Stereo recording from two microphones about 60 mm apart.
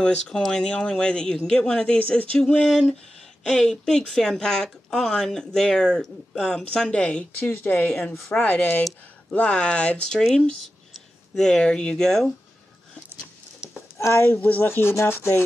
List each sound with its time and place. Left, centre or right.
0.0 s speech: centre
2.3 s speech: centre
13.6 s a sound: centre
13.9 s speech: left